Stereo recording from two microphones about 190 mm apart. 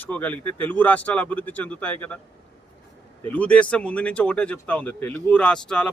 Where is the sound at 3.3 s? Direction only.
5° left (ahead or behind).